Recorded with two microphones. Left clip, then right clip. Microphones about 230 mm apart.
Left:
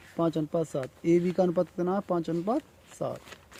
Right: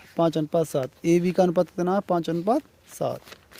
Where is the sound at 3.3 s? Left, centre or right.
Right.